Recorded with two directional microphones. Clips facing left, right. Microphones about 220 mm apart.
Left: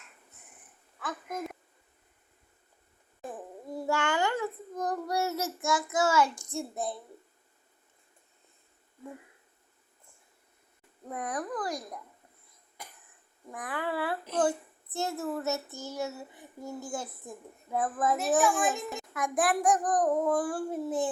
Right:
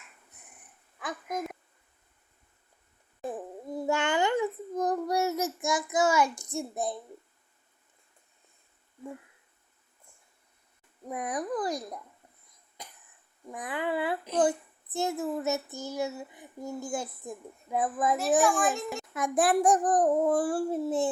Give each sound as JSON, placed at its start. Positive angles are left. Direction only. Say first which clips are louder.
{"t": 3.8, "sound": "child singing", "louder": "right 2 dB", "side_deg": -20}
{"t": 11.1, "sound": "speech", "louder": "right 3 dB", "side_deg": -15}
{"t": 12.8, "sound": "cough", "louder": "right 1 dB", "side_deg": -20}
{"t": 13.5, "sound": "a child's voice", "louder": "right 2 dB", "side_deg": -20}
{"t": 18.3, "sound": "a child's voice", "louder": "right 2 dB", "side_deg": 0}
{"t": 19.1, "sound": "a child's voice", "louder": "right 3 dB", "side_deg": -25}